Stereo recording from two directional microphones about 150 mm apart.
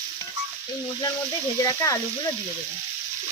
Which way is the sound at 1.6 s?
20° left (ahead or behind).